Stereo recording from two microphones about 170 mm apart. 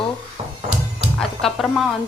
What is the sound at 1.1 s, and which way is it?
Speech, 5° left (ahead or behind).